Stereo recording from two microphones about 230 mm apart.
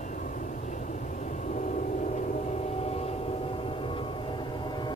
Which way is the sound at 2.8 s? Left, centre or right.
Left.